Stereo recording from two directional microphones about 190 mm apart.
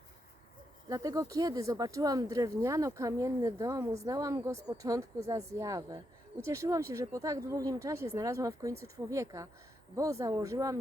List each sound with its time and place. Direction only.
0.9 s speech: 20° right (ahead or behind)